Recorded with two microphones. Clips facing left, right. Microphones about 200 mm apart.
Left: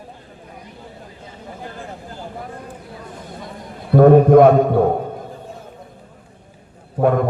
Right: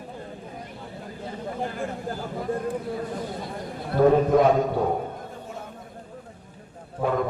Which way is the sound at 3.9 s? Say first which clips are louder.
Left 9 dB; 55° left (ahead or behind).